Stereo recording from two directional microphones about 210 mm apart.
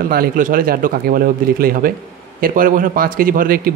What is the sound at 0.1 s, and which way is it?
A man's voice, 45° right (ahead or behind).